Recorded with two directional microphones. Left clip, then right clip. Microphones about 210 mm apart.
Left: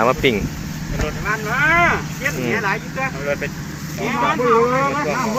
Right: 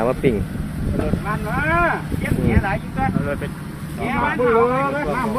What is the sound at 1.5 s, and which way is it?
Speech, 50° right (ahead or behind).